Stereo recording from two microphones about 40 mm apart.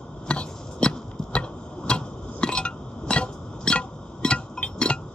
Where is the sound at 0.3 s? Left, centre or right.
Left.